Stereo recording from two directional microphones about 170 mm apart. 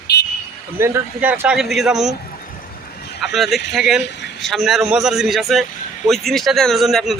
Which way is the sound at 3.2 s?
Centre (ahead or behind).